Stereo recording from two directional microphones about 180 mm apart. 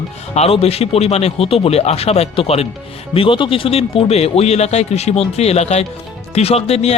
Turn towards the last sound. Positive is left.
turn(degrees=35)  # may be behind; listen again after turning